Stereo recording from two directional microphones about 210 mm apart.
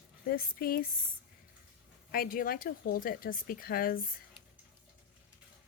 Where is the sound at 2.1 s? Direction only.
45° left (ahead or behind).